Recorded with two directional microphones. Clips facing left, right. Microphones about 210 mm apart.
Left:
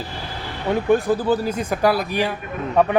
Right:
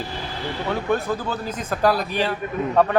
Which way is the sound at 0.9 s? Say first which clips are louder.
Left 6 dB; 15° left (ahead or behind).